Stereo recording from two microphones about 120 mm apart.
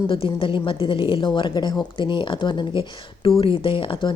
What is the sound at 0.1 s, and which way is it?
A woman's voice, 50° left (ahead or behind).